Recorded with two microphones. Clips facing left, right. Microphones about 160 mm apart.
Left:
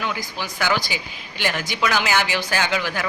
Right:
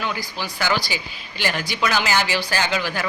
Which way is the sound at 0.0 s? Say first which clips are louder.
Even; 20° left (ahead or behind).